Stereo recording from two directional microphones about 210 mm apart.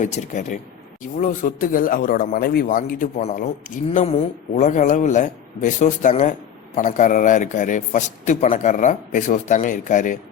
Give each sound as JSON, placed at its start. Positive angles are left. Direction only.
{"t": 0.0, "sound": "a man's voice", "side_deg": 35}